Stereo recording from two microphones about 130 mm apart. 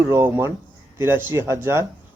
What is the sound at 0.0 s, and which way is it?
Speech, 20° right (ahead or behind).